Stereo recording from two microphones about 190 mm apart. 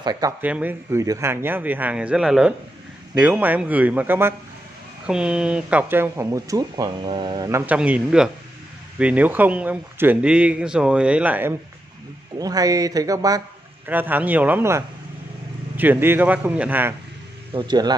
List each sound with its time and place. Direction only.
0.0 s speech: 20° right (ahead or behind)
12.4 s speech: 20° right (ahead or behind)
17.6 s speech: 20° right (ahead or behind)